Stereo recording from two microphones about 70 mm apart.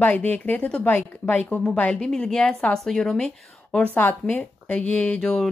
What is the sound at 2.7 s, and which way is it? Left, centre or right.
Speech, centre.